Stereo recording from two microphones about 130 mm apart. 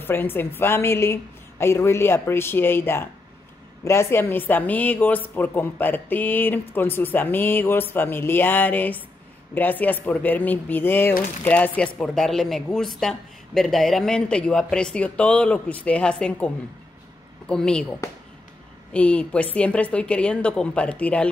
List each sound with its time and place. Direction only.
0.0 s speech: 15° left (ahead or behind)
18.9 s speech: 10° left (ahead or behind)